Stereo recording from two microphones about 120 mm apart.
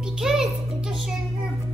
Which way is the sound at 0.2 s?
5° right (ahead or behind).